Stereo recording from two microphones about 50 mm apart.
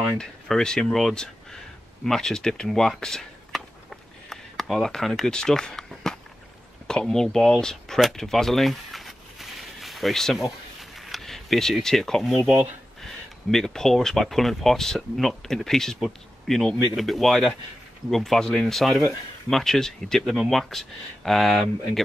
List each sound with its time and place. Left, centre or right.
0.2 s speech: centre
2.0 s a sound: centre
4.8 s speech: centre
8.2 s a sound: centre
10.3 s camera: centre
13.0 s speech: centre